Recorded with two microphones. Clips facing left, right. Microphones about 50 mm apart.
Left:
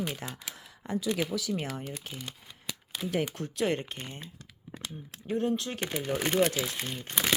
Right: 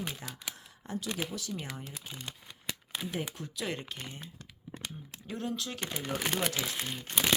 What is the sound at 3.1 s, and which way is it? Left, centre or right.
Speech, left.